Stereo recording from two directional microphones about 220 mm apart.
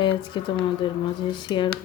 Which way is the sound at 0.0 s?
25° left (ahead or behind).